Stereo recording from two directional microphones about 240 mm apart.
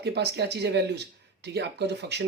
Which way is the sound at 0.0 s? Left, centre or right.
Right.